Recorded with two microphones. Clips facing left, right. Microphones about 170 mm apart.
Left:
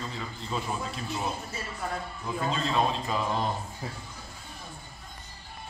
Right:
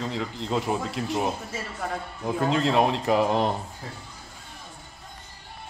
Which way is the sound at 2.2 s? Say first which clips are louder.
Right 7 dB; 70° right (ahead or behind).